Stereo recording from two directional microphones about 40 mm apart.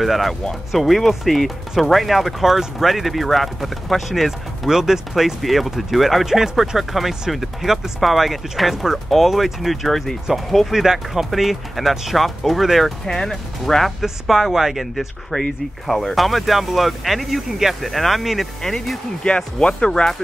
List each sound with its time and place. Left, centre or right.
0.0 s speech: centre
4.6 s speech: centre
10.7 s speech: centre
14.2 s speech: centre
14.8 s speech: centre
18.6 s speech: centre
19.2 s speech: left